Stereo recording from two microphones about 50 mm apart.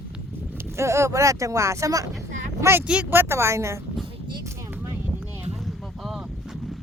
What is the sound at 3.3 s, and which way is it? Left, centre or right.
Speech, right.